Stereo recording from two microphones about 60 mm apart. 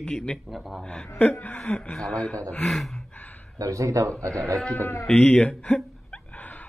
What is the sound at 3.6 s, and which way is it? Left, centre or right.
Speech, right.